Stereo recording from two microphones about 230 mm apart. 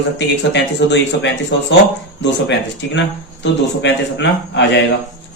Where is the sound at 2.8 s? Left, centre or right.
Left.